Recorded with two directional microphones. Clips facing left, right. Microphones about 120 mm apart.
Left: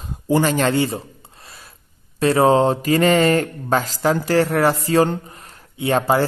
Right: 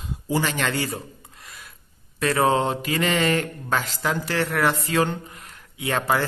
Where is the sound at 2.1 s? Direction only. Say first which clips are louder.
Left 6 dB; 30° left (ahead or behind).